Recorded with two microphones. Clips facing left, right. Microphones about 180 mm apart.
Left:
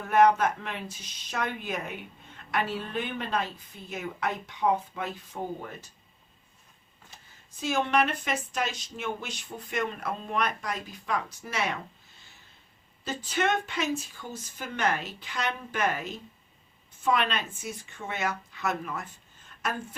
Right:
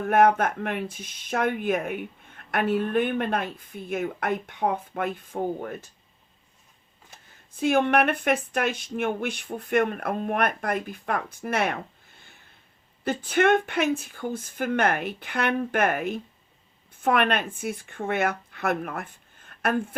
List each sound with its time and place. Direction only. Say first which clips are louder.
0.1 s speech: right 1 dB; 55° right (ahead or behind)
7.5 s a woman's voice: right 5 dB; 55° right (ahead or behind)